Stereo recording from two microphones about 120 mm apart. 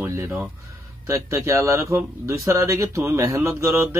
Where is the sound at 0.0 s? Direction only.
20° right (ahead or behind).